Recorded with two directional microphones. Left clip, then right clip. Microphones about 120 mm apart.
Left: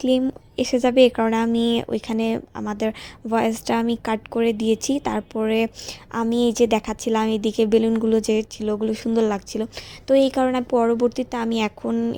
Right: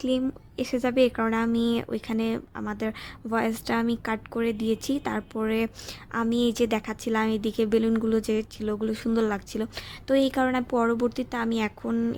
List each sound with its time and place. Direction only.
0.0 s a woman's voice: 30° left (ahead or behind)
11.9 s speech: 10° left (ahead or behind)